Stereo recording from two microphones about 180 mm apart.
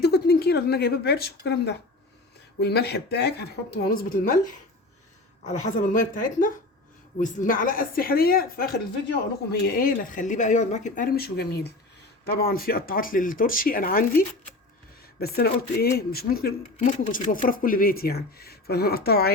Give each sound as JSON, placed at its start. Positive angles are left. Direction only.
{"t": 0.0, "sound": "speech", "side_deg": 60}
{"t": 3.8, "sound": "speech", "side_deg": 50}
{"t": 5.4, "sound": "speech", "side_deg": 40}